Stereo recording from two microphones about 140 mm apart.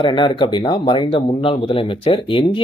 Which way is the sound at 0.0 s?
35° left (ahead or behind).